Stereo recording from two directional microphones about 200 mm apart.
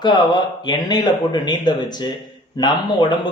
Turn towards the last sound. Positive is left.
turn(degrees=20)  # may be behind; listen again after turning